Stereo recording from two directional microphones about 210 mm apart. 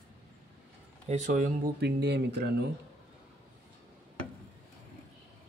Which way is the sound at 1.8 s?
50° right (ahead or behind).